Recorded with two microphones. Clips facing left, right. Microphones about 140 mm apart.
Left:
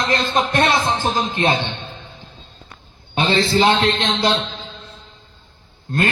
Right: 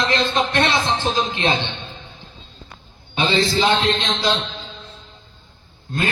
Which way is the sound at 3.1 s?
55° left (ahead or behind).